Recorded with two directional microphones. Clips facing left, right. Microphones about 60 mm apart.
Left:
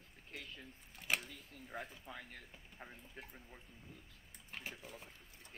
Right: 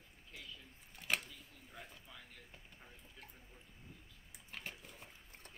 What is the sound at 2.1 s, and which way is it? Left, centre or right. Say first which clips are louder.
Speech: left 6 dB; left.